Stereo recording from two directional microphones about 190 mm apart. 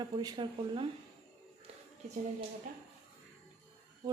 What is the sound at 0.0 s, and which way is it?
Speech, 20° right (ahead or behind).